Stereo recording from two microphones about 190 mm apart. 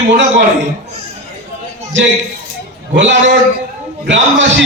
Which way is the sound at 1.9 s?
75° right (ahead or behind).